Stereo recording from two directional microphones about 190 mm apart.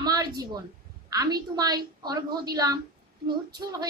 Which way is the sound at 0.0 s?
20° right (ahead or behind).